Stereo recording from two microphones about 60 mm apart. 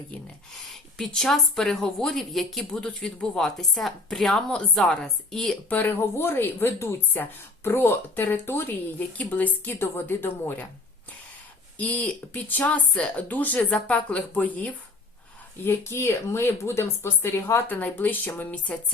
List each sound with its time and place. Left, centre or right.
0.7 s speech: centre
2.7 s speech: centre
5.6 s speech: left
9.7 s speech: left
11.8 s speech: left
13.6 s speech: centre
15.6 s speech: left
17.7 s speech: left